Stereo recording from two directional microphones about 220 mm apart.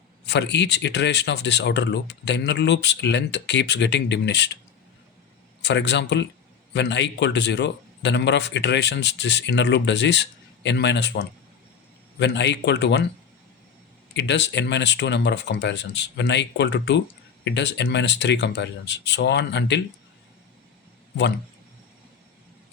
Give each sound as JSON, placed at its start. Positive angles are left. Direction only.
{"t": 0.3, "sound": "a man's voice", "side_deg": 50}
{"t": 5.6, "sound": "a man's voice", "side_deg": 50}
{"t": 14.2, "sound": "a man's voice", "side_deg": 55}